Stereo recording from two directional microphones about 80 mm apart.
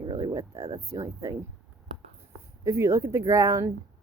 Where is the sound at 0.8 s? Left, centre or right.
Right.